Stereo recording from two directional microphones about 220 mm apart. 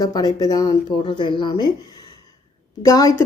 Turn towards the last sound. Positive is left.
turn(degrees=15)  # may be behind; listen again after turning